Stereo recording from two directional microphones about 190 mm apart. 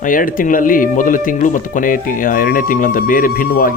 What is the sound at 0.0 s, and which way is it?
A man's voice, 45° left (ahead or behind).